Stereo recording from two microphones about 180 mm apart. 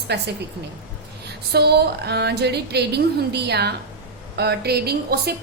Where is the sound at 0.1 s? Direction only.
65° right (ahead or behind).